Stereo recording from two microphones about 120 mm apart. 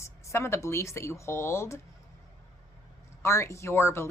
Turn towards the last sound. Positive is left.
turn(degrees=20)  # may be behind; listen again after turning